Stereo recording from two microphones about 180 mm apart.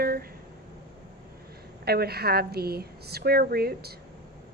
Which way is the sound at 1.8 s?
60° right (ahead or behind).